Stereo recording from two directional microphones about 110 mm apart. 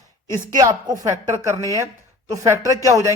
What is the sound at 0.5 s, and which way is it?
A man's voice, 35° right (ahead or behind).